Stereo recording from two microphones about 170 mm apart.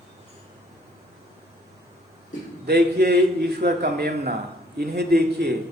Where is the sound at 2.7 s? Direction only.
70° right (ahead or behind).